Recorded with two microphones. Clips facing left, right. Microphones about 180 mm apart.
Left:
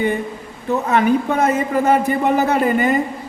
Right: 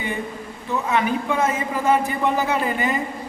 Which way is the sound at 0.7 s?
40° left (ahead or behind).